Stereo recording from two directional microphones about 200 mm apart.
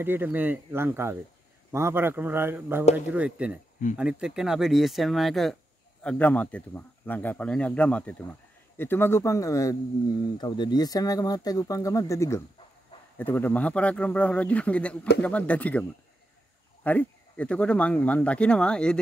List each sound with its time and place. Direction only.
0.0 s a man's voice: 10° right (ahead or behind)